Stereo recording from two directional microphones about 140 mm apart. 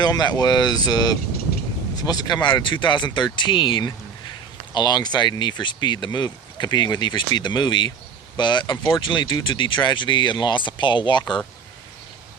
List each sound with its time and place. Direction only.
0.0 s speech: 30° left (ahead or behind)